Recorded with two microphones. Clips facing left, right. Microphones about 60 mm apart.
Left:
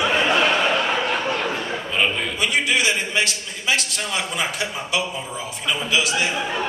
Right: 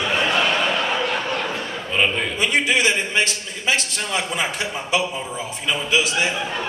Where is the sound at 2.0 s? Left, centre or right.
Centre.